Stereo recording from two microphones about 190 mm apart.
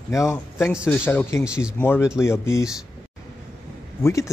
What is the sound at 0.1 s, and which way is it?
A man's voice, 15° left (ahead or behind).